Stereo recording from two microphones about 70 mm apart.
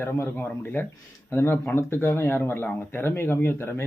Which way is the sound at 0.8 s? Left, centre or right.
Left.